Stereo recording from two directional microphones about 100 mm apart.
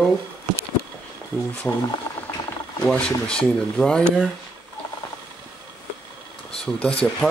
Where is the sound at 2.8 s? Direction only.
10° left (ahead or behind).